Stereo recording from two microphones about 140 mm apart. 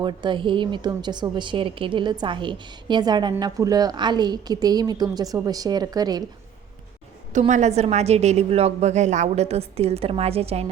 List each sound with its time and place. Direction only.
0.0 s a woman's voice: 35° right (ahead or behind)
7.3 s a woman's voice: 55° right (ahead or behind)